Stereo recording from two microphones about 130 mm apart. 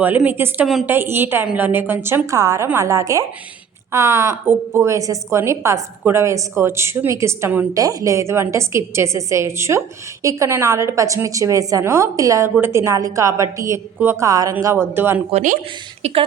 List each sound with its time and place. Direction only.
0.0 s a woman's voice: 15° right (ahead or behind)
15.3 s speech: 65° right (ahead or behind)